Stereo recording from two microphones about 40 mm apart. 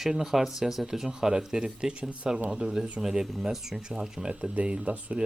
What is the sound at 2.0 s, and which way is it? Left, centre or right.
Speech, right.